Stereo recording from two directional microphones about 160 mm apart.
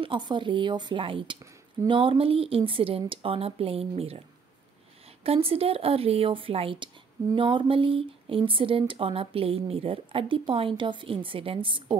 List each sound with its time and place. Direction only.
0.0 s speech: 30° right (ahead or behind)
5.2 s speech: 35° right (ahead or behind)